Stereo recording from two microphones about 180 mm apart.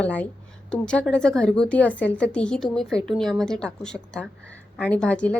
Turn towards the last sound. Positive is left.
turn(degrees=5)  # may be behind; listen again after turning